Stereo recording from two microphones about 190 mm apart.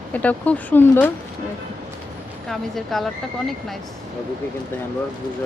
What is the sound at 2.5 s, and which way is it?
Speech, centre (ahead or behind).